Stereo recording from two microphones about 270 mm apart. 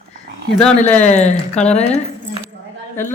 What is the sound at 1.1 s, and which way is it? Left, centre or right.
Speech, left.